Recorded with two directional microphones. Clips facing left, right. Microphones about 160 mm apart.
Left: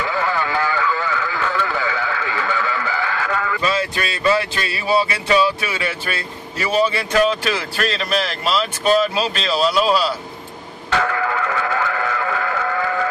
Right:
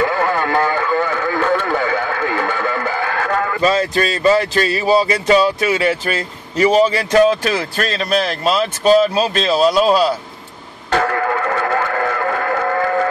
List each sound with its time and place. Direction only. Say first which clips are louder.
0.0 s radio: right 5 dB; 50° right (ahead or behind)
6.7 s speech: right 3 dB; 40° right (ahead or behind)
10.9 s a sound: right 3 dB; 45° right (ahead or behind)